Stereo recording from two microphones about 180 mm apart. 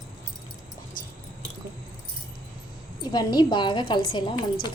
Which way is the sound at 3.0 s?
25° left (ahead or behind).